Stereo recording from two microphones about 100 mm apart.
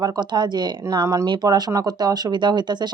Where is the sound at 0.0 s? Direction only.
45° right (ahead or behind).